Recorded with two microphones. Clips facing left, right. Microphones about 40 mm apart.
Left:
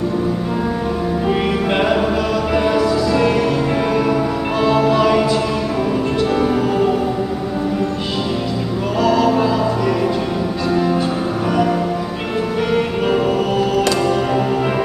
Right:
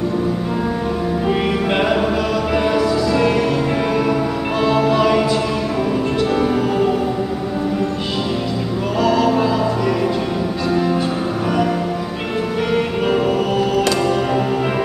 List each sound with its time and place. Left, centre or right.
1.7 s music: centre
9.0 s music: right
13.7 s music: centre
14.3 s music: centre